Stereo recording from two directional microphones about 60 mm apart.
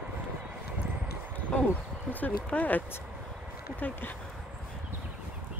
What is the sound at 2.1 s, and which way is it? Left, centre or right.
Speech, left.